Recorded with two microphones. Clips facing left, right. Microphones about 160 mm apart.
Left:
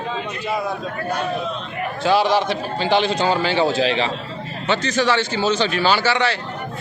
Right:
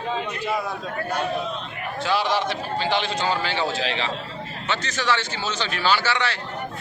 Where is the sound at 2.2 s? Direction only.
15° left (ahead or behind).